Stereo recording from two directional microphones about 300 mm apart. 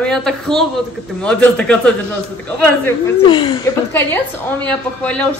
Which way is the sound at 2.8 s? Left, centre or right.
Centre.